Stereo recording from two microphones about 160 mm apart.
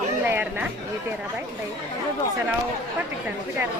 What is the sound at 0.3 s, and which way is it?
Chatter, 15° right (ahead or behind).